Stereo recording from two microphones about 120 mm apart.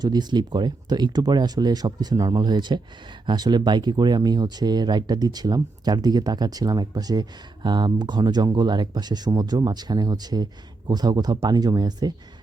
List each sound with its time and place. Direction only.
0.0 s speech: 35° right (ahead or behind)